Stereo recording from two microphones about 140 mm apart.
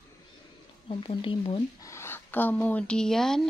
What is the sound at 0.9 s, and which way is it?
Speech, 40° left (ahead or behind).